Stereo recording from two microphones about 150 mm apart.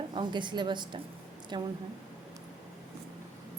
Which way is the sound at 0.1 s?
30° right (ahead or behind).